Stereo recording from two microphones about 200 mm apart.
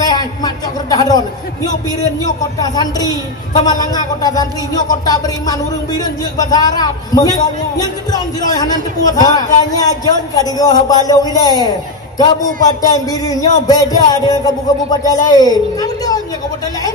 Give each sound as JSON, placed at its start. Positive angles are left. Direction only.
{"t": 0.1, "sound": "speech", "side_deg": 20}